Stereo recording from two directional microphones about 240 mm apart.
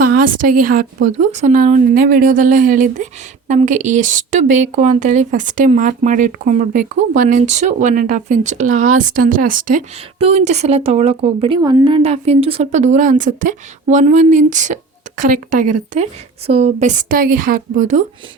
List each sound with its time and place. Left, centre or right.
0.0 s a woman's voice: right